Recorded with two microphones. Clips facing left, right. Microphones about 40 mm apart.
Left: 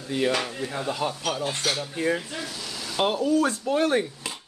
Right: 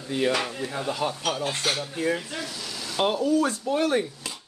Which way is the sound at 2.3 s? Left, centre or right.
Centre.